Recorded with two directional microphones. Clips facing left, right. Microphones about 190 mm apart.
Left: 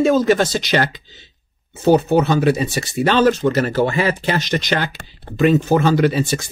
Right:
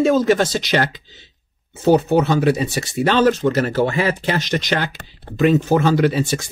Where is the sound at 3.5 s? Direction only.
5° left (ahead or behind).